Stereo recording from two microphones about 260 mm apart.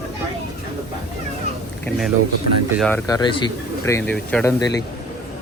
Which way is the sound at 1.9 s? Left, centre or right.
Centre.